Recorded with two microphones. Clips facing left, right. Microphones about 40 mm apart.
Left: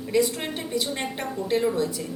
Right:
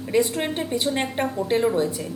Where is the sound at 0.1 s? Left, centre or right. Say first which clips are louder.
Right 2 dB; right.